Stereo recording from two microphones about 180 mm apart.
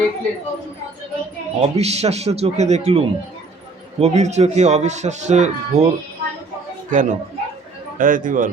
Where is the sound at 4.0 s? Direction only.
40° right (ahead or behind).